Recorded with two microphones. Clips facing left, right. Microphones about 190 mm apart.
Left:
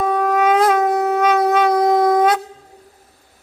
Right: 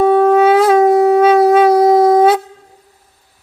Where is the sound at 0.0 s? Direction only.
30° right (ahead or behind).